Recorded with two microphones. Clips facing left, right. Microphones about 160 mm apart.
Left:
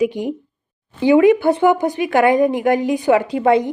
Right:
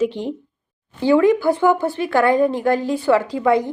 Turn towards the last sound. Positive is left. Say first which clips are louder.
# left 2 dB
turn(degrees=20)  # may be behind; listen again after turning